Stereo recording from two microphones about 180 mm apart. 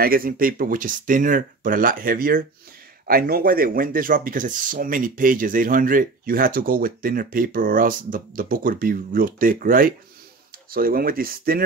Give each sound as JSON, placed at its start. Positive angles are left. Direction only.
{"t": 0.0, "sound": "speech", "side_deg": -55}